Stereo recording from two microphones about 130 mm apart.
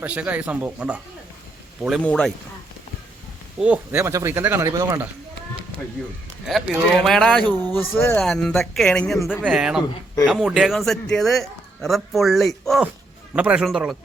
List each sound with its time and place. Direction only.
0.0 s speech: 10° right (ahead or behind)
2.0 s a man's voice: 5° left (ahead or behind)
3.6 s speech: 10° right (ahead or behind)
4.0 s speech: 20° right (ahead or behind)
6.5 s speech: centre (ahead or behind)
7.8 s a man's voice: 20° left (ahead or behind)
8.1 s speech: 5° left (ahead or behind)
13.3 s speech: 10° right (ahead or behind)